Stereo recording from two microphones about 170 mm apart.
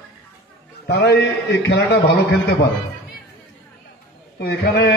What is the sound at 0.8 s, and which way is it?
Speech, 70° left (ahead or behind).